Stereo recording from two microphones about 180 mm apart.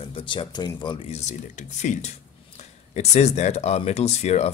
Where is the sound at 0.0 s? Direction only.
30° left (ahead or behind).